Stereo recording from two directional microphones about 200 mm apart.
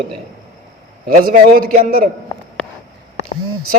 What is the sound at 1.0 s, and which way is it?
A man's voice, 45° right (ahead or behind).